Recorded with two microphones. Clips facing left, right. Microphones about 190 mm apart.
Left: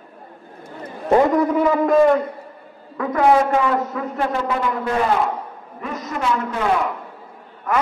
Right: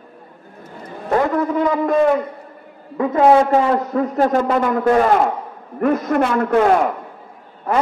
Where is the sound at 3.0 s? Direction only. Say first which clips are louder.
Right 3 dB; 25° right (ahead or behind); by 6.9 s 50° right (ahead or behind).